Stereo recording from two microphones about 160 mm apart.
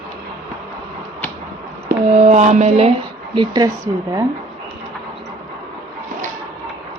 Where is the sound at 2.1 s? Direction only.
45° right (ahead or behind).